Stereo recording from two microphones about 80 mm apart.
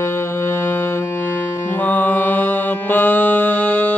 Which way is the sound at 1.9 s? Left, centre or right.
Left.